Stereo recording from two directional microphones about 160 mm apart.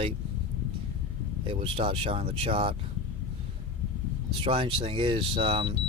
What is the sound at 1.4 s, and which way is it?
Speech, 35° right (ahead or behind).